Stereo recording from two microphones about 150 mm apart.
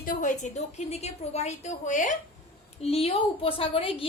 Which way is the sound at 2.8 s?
40° left (ahead or behind).